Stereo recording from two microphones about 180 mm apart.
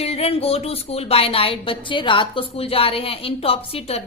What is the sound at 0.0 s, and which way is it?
A woman's voice, 35° left (ahead or behind).